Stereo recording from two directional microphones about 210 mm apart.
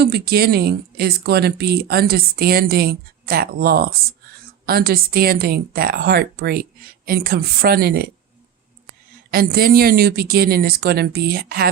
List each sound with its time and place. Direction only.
0.0 s speech: 50° right (ahead or behind)
9.3 s speech: 45° right (ahead or behind)